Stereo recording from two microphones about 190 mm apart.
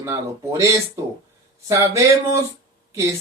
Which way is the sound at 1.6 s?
15° right (ahead or behind).